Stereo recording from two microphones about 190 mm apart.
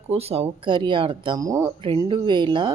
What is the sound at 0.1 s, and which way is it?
Speech, 30° right (ahead or behind).